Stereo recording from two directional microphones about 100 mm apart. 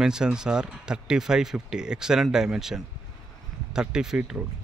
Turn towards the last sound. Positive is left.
turn(degrees=-5)  # may be behind; listen again after turning